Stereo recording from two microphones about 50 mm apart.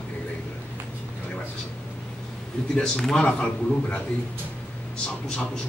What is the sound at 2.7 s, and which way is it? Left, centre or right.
Speech, centre.